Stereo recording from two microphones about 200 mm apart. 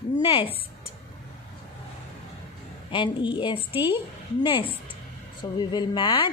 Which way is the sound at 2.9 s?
25° left (ahead or behind).